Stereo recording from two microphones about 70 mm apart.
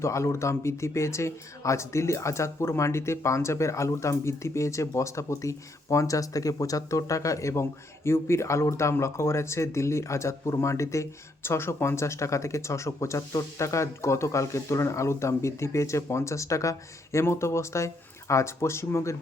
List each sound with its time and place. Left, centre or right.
0.0 s speech: left